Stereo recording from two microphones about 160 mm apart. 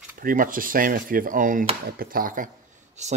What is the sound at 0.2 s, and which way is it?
Speech, 60° right (ahead or behind).